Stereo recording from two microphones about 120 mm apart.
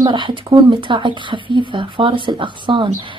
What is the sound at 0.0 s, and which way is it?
A woman's voice, 40° right (ahead or behind).